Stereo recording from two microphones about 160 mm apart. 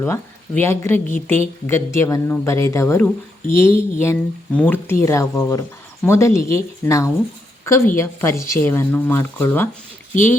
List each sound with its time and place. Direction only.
0.0 s a woman's voice: 15° left (ahead or behind)